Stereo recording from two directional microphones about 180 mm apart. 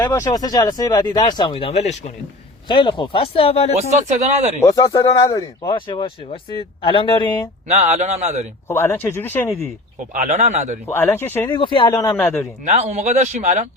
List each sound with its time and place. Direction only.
0.0 s speech: 20° left (ahead or behind); by 2.1 s 35° left (ahead or behind)
2.6 s speech: 25° left (ahead or behind)
3.8 s speech: 40° right (ahead or behind)
4.6 s speech: 20° left (ahead or behind)
7.7 s speech: 40° right (ahead or behind)
8.6 s speech: 15° left (ahead or behind)
10.2 s speech: 40° right (ahead or behind)
10.8 s speech: 15° left (ahead or behind)
11.4 s speech: 25° left (ahead or behind)
12.1 s speech: 10° left (ahead or behind)
12.6 s speech: 40° right (ahead or behind)